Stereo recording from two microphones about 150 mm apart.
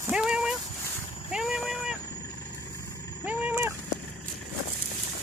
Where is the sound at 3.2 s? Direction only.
10° right (ahead or behind).